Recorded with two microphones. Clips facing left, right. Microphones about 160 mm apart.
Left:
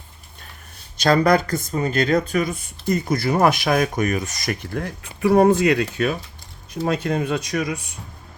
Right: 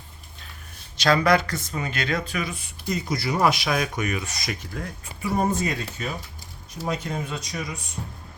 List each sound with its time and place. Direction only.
1.0 s speech: 45° left (ahead or behind); by 7.8 s 65° left (ahead or behind)